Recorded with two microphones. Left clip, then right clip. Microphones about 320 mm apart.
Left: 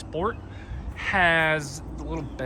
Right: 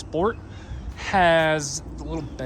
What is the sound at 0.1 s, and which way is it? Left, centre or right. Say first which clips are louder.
Speech: right 4 dB; centre.